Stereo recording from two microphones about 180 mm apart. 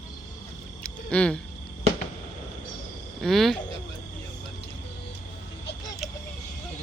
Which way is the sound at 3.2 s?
Centre (ahead or behind).